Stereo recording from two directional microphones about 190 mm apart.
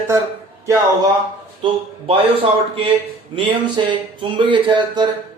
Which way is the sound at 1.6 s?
30° right (ahead or behind).